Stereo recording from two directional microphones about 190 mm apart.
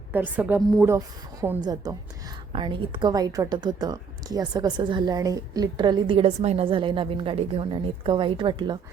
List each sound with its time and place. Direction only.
0.1 s a woman's voice: 10° right (ahead or behind); by 8.8 s 25° right (ahead or behind)